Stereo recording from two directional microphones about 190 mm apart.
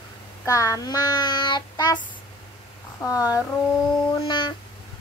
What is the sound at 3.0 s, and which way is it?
Speech, 20° left (ahead or behind).